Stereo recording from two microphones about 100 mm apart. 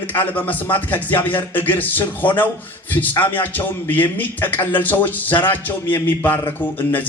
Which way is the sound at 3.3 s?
20° left (ahead or behind).